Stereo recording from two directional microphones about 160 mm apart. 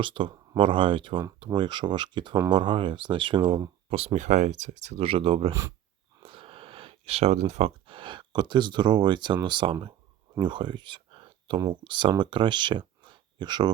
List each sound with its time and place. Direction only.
0.0 s speech: 30° right (ahead or behind)
5.5 s speech: 20° right (ahead or behind)
6.2 s speech: 35° right (ahead or behind)